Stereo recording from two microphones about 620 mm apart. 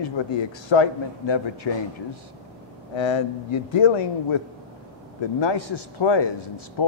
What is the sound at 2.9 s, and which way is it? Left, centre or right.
Speech, left.